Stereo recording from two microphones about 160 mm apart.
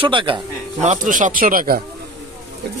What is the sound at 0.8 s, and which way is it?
Speech, 55° right (ahead or behind).